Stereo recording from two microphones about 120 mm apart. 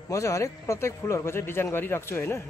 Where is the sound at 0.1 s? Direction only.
25° left (ahead or behind).